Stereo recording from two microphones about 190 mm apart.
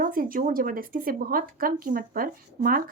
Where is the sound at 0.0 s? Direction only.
50° right (ahead or behind).